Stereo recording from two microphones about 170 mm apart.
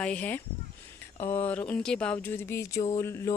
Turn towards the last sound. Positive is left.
turn(degrees=15)  # may be behind; listen again after turning